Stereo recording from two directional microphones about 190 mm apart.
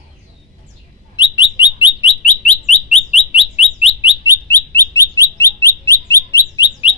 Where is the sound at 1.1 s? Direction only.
25° left (ahead or behind).